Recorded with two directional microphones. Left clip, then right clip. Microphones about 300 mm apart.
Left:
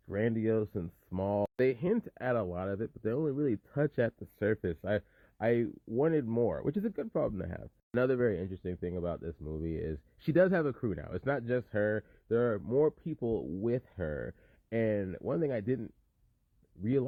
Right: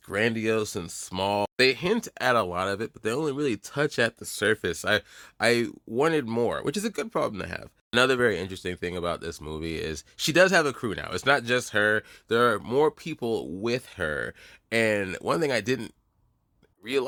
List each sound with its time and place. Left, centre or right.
0.1 s speech: centre
13.1 s speech: right
13.7 s speech: centre